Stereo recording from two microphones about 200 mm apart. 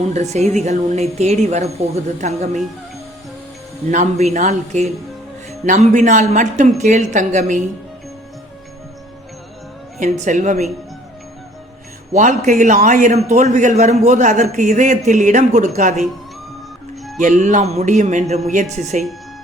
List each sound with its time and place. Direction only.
0.0 s a man's voice: 35° right (ahead or behind)
3.8 s a man's voice: 35° right (ahead or behind)
10.0 s a man's voice: 35° right (ahead or behind)
12.1 s a man's voice: 40° right (ahead or behind)
17.2 s a man's voice: 40° right (ahead or behind)